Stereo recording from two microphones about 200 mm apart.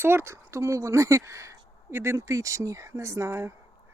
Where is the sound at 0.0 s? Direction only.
10° right (ahead or behind).